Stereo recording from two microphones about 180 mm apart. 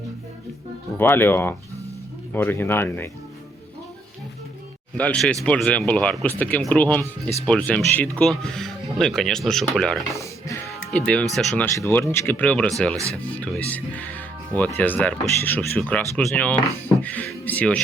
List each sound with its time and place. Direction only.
0.9 s speech: 10° left (ahead or behind)
4.9 s speech: 5° left (ahead or behind)
10.1 s speech: 15° left (ahead or behind)